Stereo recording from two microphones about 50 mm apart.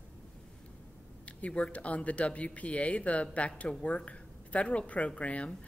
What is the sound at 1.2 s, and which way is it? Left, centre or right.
Speech, left.